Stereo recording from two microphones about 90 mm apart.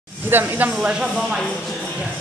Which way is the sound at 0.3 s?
20° right (ahead or behind).